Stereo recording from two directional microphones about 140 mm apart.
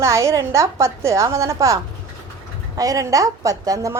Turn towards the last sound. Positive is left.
turn(degrees=-25)  # may be behind; listen again after turning